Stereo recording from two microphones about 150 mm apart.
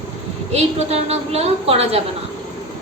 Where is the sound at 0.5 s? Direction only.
45° right (ahead or behind).